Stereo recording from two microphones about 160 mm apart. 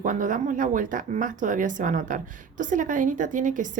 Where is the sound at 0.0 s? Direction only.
55° right (ahead or behind).